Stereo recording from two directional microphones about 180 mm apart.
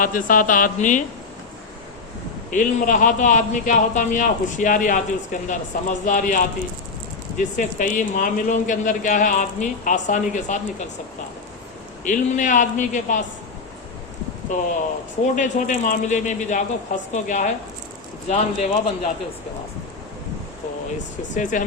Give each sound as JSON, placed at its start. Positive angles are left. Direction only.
{"t": 0.0, "sound": "a man's voice", "side_deg": 50}
{"t": 2.5, "sound": "a man's voice", "side_deg": 45}
{"t": 12.0, "sound": "a man's voice", "side_deg": 45}
{"t": 14.5, "sound": "a man's voice", "side_deg": 45}
{"t": 21.3, "sound": "a man's voice", "side_deg": 45}